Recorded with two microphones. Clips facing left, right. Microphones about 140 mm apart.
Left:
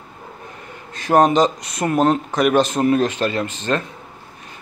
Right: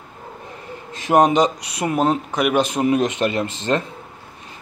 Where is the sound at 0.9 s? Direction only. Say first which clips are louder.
Left 1 dB; 20° right (ahead or behind).